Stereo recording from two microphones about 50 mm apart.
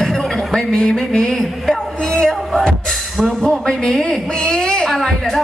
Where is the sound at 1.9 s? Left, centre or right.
Centre.